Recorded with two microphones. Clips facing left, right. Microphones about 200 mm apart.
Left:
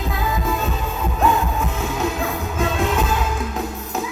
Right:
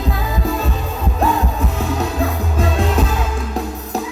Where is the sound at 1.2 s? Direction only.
35° right (ahead or behind).